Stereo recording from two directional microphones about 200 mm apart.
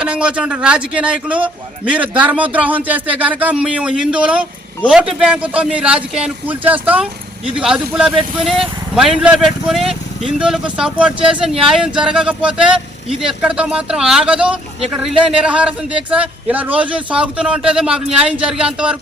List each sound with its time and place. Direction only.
0.0 s speech: 5° right (ahead or behind)